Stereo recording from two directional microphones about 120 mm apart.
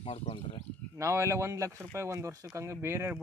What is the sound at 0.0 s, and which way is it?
Speech, 50° left (ahead or behind).